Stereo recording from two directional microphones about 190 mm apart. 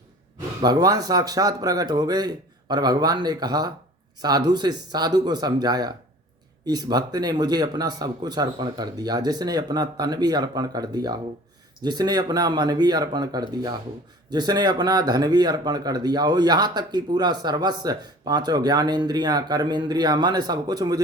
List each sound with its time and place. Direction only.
0.6 s speech: 20° right (ahead or behind)